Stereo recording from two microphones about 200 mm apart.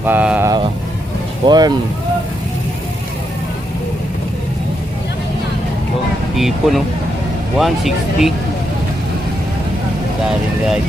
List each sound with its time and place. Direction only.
0.0 s speech: 10° right (ahead or behind)
1.5 s speech: 20° right (ahead or behind)
6.3 s speech: centre (ahead or behind)